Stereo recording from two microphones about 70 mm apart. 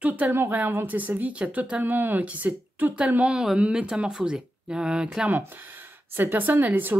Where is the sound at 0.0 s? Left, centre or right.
Right.